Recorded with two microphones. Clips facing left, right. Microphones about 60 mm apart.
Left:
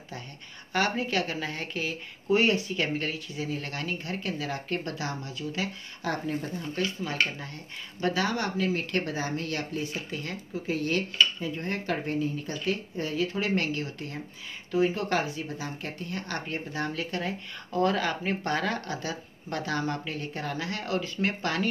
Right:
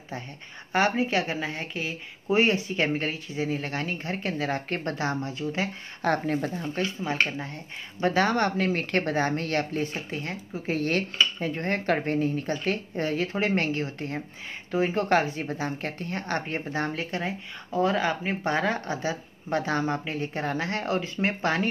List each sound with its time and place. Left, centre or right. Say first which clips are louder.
0.7 s speech: right 3 dB; right
2.2 s speech: right 1 dB; right
6.0 s speech: right 5 dB; right
6.6 s speech: right 2 dB; right
8.0 s speech: right 5 dB; right
10.1 s speech: right 1 dB; right
10.8 s speech: even; right
17.6 s speech: right 2 dB; centre; by 21.6 s right